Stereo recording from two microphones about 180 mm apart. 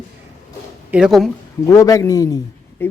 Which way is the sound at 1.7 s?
20° left (ahead or behind).